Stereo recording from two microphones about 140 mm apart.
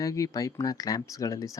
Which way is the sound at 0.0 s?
25° left (ahead or behind).